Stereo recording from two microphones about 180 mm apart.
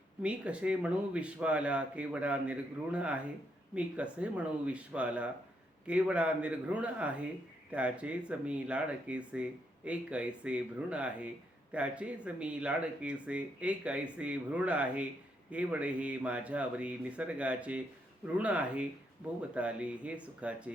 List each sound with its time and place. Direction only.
0.2 s speech: 5° right (ahead or behind)